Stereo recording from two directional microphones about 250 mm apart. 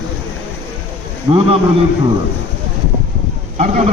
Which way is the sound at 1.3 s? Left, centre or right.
Right.